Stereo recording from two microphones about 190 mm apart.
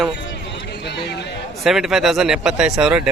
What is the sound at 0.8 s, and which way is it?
Speech, 60° left (ahead or behind).